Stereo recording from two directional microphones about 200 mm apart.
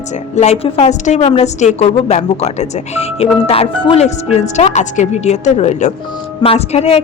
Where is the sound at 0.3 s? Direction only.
35° left (ahead or behind).